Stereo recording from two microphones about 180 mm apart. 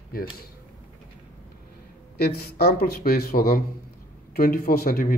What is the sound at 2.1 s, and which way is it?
A man's voice, 60° left (ahead or behind).